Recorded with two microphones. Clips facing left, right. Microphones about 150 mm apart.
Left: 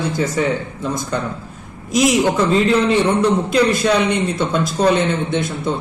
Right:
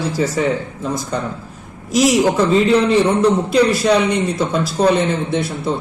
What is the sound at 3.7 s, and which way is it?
A man's voice, 5° right (ahead or behind).